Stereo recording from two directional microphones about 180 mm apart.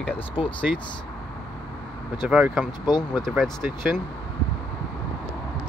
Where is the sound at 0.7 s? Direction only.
5° right (ahead or behind).